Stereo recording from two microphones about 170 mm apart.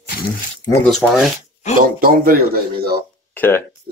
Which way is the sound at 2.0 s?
60° right (ahead or behind).